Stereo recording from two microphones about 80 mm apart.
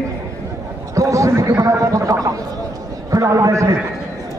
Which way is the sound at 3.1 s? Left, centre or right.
Right.